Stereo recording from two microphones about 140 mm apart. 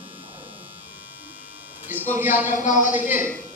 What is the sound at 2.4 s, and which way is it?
Speech, 65° left (ahead or behind).